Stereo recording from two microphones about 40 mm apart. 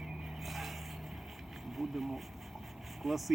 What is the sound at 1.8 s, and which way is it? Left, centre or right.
Speech, centre.